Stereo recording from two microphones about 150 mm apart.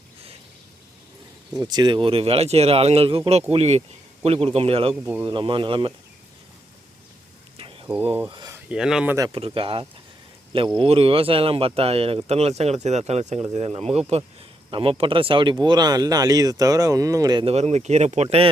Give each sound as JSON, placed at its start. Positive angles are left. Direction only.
{"t": 1.5, "sound": "speech", "side_deg": -25}
{"t": 7.5, "sound": "a sound", "side_deg": -40}
{"t": 8.5, "sound": "speech", "side_deg": -5}
{"t": 9.3, "sound": "speech", "side_deg": -35}
{"t": 17.4, "sound": "speech", "side_deg": -45}